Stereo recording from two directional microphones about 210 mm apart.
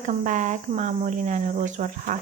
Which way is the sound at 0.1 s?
35° right (ahead or behind).